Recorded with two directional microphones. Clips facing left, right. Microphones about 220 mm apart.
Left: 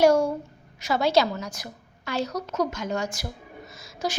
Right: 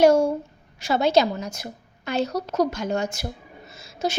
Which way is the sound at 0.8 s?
25° right (ahead or behind).